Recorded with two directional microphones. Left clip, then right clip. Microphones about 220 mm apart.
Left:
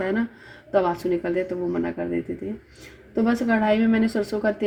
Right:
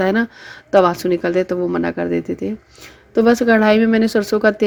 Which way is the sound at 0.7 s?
30° right (ahead or behind).